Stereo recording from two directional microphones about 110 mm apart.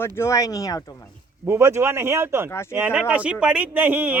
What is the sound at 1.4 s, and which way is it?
Speech, 25° right (ahead or behind).